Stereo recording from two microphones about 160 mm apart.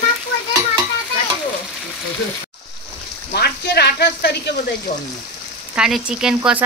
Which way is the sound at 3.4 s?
90° left.